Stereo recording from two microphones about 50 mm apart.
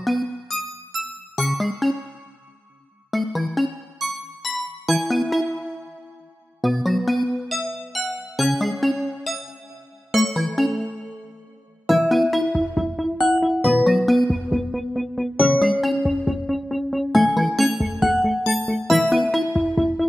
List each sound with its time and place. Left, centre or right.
0.0 s music: centre
3.1 s music: centre
6.6 s music: centre
8.9 s music: centre
10.1 s music: centre
11.9 s music: centre